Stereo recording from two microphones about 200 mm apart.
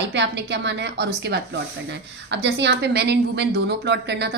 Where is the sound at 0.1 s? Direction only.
60° right (ahead or behind).